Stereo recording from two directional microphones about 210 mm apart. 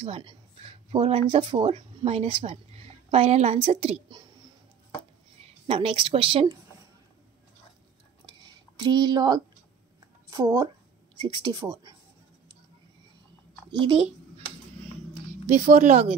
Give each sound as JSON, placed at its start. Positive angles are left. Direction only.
{"t": 0.0, "sound": "speech", "side_deg": -25}
{"t": 5.4, "sound": "a woman's voice", "side_deg": -25}
{"t": 8.4, "sound": "a sound", "side_deg": -20}
{"t": 10.3, "sound": "speech", "side_deg": -15}
{"t": 13.7, "sound": "a child's voice", "side_deg": -25}
{"t": 15.4, "sound": "speech", "side_deg": -35}